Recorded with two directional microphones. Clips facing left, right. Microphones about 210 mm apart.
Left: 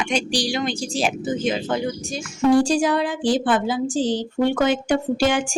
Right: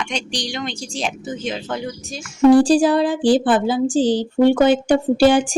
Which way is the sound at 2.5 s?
35° right (ahead or behind).